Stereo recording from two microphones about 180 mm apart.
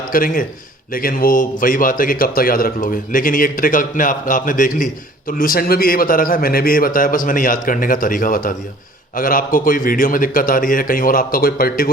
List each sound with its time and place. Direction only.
0.1 s a man's voice: 50° left (ahead or behind)